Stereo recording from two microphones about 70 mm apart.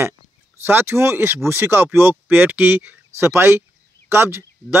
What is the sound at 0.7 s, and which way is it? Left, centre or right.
Speech, right.